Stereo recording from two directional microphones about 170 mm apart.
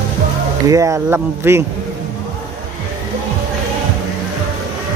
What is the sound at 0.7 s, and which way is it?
Speech, 20° right (ahead or behind).